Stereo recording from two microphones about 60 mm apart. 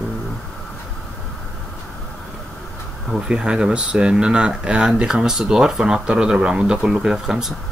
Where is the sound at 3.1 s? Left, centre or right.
Centre.